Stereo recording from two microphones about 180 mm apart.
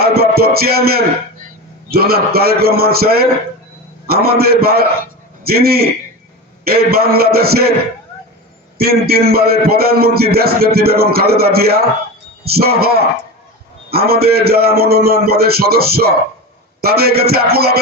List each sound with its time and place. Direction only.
0.0 s music: 60° right (ahead or behind)
1.9 s a man's voice: 60° right (ahead or behind)
8.8 s a man's voice: 60° right (ahead or behind)